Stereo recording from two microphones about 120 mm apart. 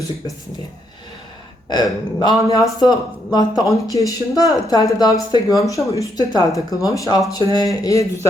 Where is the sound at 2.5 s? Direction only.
30° left (ahead or behind).